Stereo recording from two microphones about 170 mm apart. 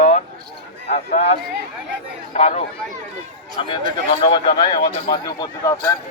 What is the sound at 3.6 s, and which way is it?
Speech, 30° left (ahead or behind).